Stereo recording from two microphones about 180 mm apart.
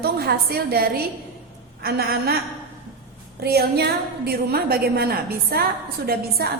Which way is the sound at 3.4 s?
60° right (ahead or behind).